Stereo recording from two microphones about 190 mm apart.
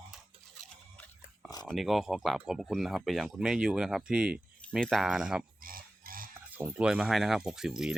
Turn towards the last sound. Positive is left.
turn(degrees=-5)  # may be behind; listen again after turning